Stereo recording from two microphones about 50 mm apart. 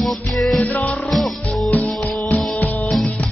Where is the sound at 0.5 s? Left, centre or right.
Left.